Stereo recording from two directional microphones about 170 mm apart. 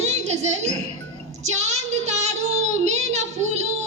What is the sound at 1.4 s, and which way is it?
Child singing, 40° right (ahead or behind).